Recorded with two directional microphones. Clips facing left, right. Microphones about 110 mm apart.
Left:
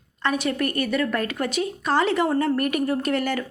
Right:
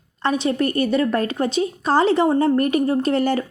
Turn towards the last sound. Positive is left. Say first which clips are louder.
# right 5 dB
turn(degrees=-30)  # may be behind; listen again after turning